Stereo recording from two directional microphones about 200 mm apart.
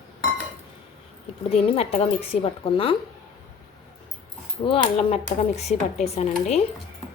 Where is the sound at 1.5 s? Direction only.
30° left (ahead or behind).